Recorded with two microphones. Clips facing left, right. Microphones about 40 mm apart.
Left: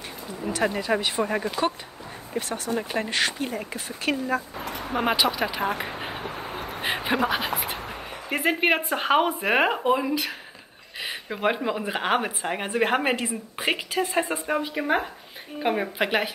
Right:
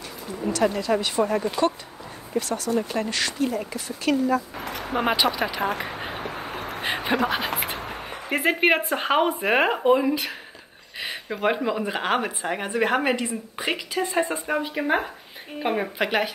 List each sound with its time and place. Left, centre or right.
0.5 s speech: left
2.3 s speech: left
5.0 s speech: centre
6.2 s a sound: right
6.8 s a sound: centre
8.3 s speech: centre
11.0 s a sound: centre
11.4 s a woman's voice: centre; by 13.7 s left
13.9 s speech: centre